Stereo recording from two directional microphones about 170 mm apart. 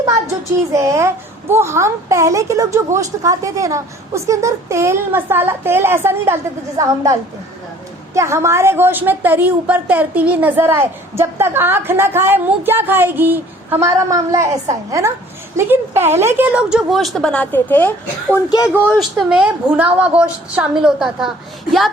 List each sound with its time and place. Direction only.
0.7 s a woman's voice: 15° right (ahead or behind); by 17.9 s 10° left (ahead or behind)
18.9 s a woman's voice: centre (ahead or behind)